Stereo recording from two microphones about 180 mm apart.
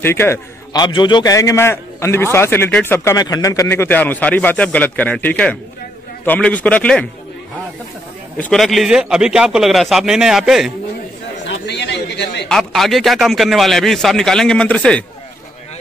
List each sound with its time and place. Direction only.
0.0 s a man's voice: 15° left (ahead or behind)
0.8 s a man's voice: 25° left (ahead or behind); by 7.1 s 5° left (ahead or behind)
8.4 s a man's voice: 5° left (ahead or behind)
11.6 s a sound: 70° left (ahead or behind)
12.4 s a man's voice: centre (ahead or behind)